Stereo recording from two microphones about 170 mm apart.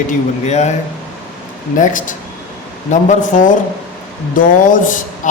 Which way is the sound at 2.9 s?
45° left (ahead or behind).